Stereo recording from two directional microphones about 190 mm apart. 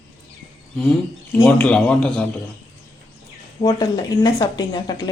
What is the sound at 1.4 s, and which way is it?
Speech, 5° left (ahead or behind).